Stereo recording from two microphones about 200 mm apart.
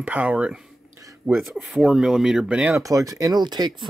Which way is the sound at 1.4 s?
Centre (ahead or behind).